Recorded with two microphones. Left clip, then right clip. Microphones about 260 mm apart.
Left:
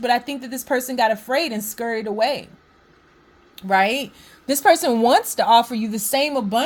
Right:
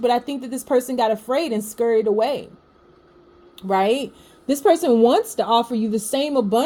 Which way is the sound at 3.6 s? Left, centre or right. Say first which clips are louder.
Left 1 dB; left.